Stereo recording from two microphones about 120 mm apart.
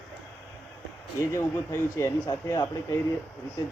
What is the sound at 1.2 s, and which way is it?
Speech, 25° left (ahead or behind).